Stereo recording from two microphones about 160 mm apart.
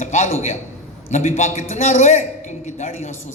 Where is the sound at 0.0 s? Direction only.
50° left (ahead or behind).